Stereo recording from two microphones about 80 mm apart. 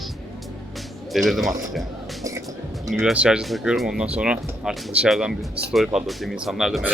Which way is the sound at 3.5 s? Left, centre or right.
Centre.